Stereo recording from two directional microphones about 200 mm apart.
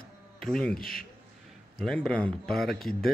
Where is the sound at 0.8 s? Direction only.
45° left (ahead or behind).